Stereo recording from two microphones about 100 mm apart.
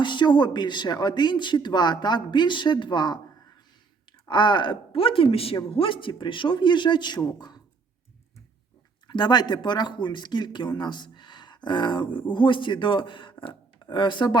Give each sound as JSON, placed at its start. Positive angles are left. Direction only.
{"t": 0.0, "sound": "speech", "side_deg": 50}
{"t": 4.3, "sound": "a man's voice", "side_deg": 50}
{"t": 9.0, "sound": "speech", "side_deg": 45}